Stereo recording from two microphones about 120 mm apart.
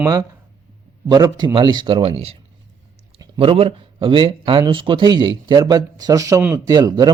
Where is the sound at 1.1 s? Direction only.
35° right (ahead or behind).